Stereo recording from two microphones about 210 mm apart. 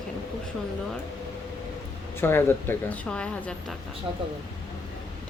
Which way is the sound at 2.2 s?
10° left (ahead or behind).